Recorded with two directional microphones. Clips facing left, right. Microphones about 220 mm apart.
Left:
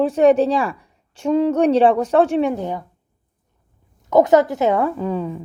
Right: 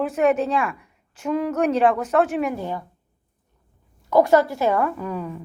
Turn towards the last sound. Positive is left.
turn(degrees=25)  # may be behind; listen again after turning